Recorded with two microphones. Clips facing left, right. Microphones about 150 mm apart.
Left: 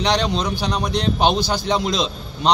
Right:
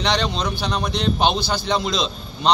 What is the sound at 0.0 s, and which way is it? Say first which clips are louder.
A man's voice: left 2 dB; 10° left (ahead or behind).